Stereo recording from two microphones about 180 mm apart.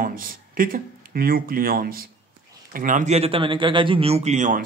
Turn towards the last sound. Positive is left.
turn(degrees=-45)  # may be behind; listen again after turning